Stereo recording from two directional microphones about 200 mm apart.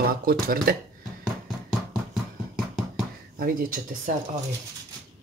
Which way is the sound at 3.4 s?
45° right (ahead or behind).